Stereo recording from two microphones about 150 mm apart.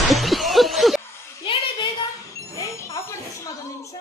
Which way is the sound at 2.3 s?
20° left (ahead or behind).